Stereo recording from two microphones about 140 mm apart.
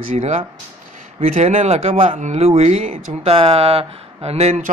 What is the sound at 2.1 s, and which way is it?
Speech, 60° right (ahead or behind).